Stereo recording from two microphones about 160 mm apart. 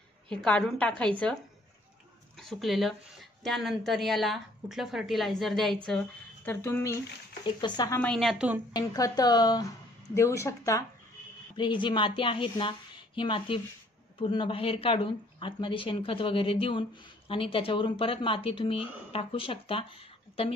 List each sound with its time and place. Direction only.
0.3 s a woman's voice: 5° left (ahead or behind); by 8.0 s 25° left (ahead or behind)
8.0 s a woman's voice: 5° left (ahead or behind)
8.7 s speech: 20° left (ahead or behind)
11.5 s speech: 30° left (ahead or behind)